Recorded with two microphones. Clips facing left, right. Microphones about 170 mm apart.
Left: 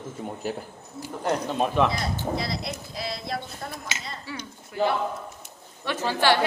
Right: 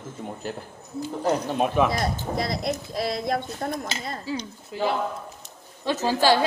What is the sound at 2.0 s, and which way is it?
Speech, 50° right (ahead or behind).